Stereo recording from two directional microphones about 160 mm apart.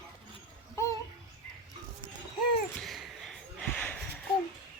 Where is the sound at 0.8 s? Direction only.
15° left (ahead or behind).